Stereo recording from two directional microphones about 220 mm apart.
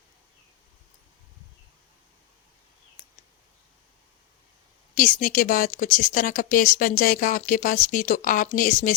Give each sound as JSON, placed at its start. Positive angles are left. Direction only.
{"t": 4.9, "sound": "speech", "side_deg": 35}